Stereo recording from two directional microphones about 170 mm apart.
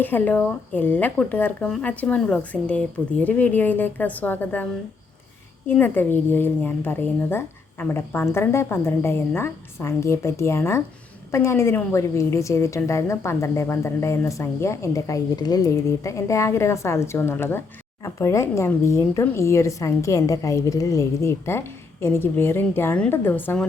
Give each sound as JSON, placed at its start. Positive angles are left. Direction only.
{"t": 0.0, "sound": "a woman's voice", "side_deg": 10}
{"t": 5.6, "sound": "a woman's voice", "side_deg": 10}